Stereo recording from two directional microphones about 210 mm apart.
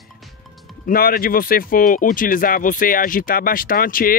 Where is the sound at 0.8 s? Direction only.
45° left (ahead or behind).